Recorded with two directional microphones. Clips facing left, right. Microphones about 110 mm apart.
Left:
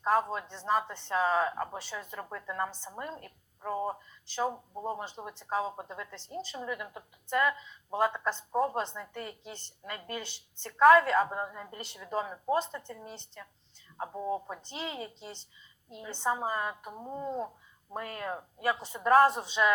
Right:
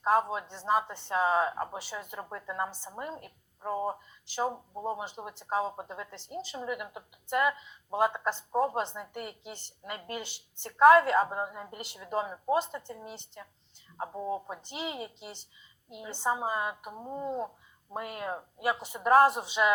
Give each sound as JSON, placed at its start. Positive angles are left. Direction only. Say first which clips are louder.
{"t": 0.3, "sound": "a woman's voice", "louder": "right 1 dB", "side_deg": -10}